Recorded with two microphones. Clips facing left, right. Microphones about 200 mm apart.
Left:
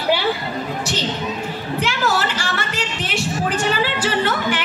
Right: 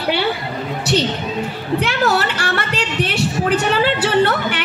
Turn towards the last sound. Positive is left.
turn(degrees=-60)  # may be behind; listen again after turning